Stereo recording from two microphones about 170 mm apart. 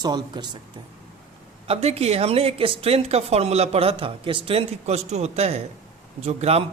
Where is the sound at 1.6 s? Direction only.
40° right (ahead or behind).